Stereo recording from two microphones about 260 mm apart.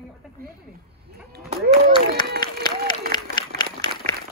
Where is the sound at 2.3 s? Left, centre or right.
Right.